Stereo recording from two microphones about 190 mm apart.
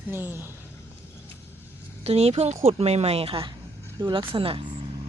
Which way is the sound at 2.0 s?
35° right (ahead or behind).